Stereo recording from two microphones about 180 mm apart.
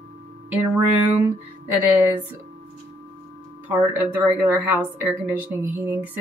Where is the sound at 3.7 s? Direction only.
10° right (ahead or behind).